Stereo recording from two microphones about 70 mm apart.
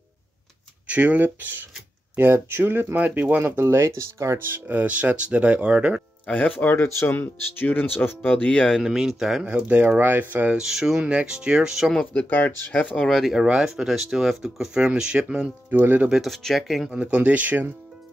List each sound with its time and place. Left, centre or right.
0.8 s speech: right
3.5 s speech: right
4.5 s speech: right
6.2 s speech: centre
8.8 s speech: centre
9.6 s speech: right
10.6 s speech: centre
12.1 s speech: left
12.9 s speech: centre
15.7 s speech: right
16.1 s speech: centre
16.9 s speech: centre